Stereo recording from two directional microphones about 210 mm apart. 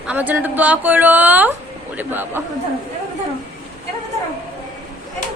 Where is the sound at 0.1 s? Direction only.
10° right (ahead or behind).